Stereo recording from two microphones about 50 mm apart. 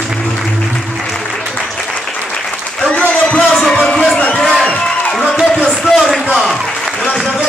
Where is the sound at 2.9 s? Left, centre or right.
Left.